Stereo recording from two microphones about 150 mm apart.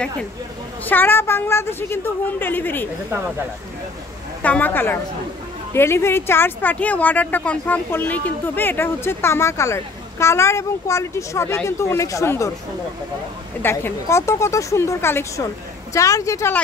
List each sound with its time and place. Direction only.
0.8 s speech: 15° left (ahead or behind)
4.4 s speech: 10° left (ahead or behind)
13.6 s speech: 15° left (ahead or behind)